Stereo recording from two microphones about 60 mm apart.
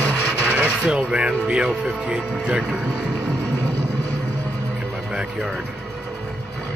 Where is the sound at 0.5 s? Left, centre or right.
Centre.